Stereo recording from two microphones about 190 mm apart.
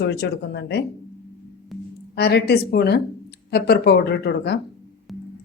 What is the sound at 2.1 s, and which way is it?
Speech, 60° left (ahead or behind).